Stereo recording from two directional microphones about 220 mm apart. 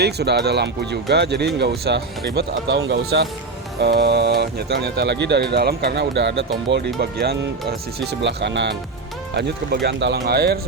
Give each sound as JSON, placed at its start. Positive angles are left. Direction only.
{"t": 0.0, "sound": "speech", "side_deg": -50}